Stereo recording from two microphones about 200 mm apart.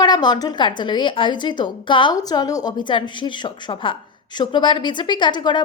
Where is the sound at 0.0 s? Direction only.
20° left (ahead or behind).